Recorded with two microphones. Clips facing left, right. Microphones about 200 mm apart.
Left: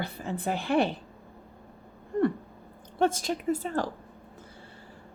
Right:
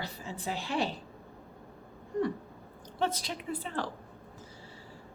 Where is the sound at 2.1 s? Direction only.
55° left (ahead or behind).